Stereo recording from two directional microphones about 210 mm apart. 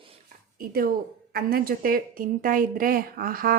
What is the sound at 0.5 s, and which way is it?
A woman's voice, 45° right (ahead or behind).